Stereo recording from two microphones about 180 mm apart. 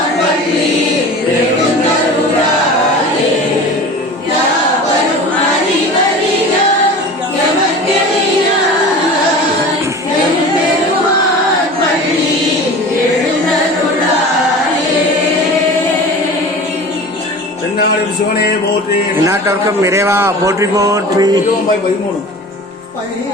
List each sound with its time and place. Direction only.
19.2 s a man's voice: 15° right (ahead or behind)